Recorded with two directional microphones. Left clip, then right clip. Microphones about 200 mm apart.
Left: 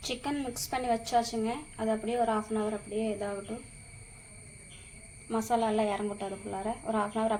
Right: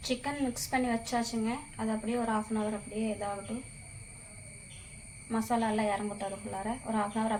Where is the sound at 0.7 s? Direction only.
30° left (ahead or behind).